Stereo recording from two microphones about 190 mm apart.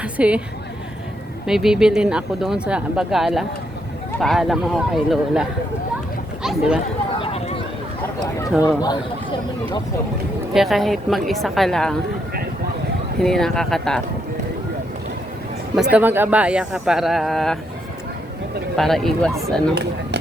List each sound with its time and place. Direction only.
0.0 s a woman's voice: 5° right (ahead or behind)
1.5 s speech: centre (ahead or behind)
6.4 s a sound: 5° right (ahead or behind)
7.2 s a sound: 35° left (ahead or behind)
10.5 s speech: centre (ahead or behind)
13.1 s speech: centre (ahead or behind)
15.7 s speech: 5° right (ahead or behind)
18.8 s speech: centre (ahead or behind)
19.7 s speech: 60° right (ahead or behind)